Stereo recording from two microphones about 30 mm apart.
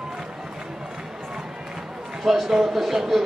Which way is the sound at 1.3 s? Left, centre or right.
Right.